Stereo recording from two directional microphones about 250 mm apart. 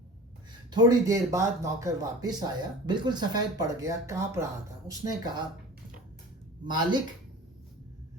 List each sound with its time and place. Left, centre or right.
0.7 s speech: centre
6.7 s speech: centre